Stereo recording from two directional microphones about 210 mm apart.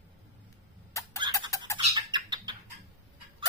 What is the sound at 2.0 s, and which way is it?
Bird, 20° right (ahead or behind).